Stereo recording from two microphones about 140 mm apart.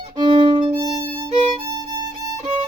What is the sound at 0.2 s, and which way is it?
Violin, 35° right (ahead or behind).